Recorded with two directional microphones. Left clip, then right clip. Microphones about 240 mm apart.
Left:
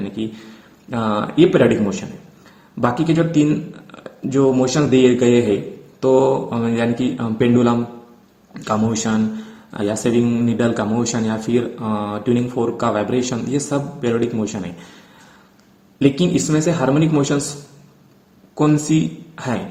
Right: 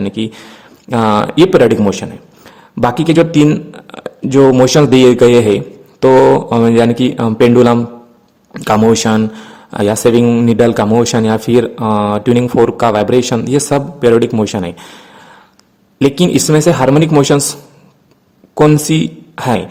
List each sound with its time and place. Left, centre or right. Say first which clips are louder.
0.9 s speech: right 9 dB; right
16.0 s speech: right 6 dB; right
18.5 s speech: right 7 dB; right